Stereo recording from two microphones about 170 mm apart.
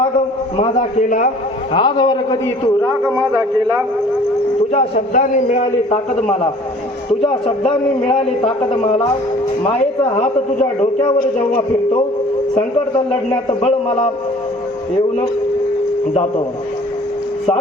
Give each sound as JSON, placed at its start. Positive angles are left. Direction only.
{"t": 0.9, "sound": "a man's voice", "side_deg": 50}
{"t": 1.7, "sound": "a man's voice", "side_deg": 25}
{"t": 3.0, "sound": "speech", "side_deg": -15}
{"t": 4.7, "sound": "a man's voice", "side_deg": 45}
{"t": 10.2, "sound": "a man's voice", "side_deg": 40}
{"t": 13.5, "sound": "a man's voice", "side_deg": 35}